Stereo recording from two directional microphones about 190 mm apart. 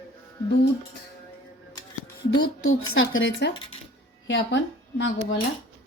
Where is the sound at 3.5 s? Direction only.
25° left (ahead or behind).